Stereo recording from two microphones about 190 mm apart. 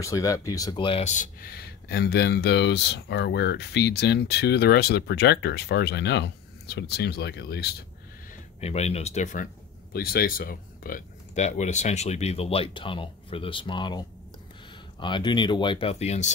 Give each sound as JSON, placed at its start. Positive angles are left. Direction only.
{"t": 0.0, "sound": "speech", "side_deg": 15}
{"t": 8.5, "sound": "speech", "side_deg": 35}
{"t": 9.9, "sound": "speech", "side_deg": 55}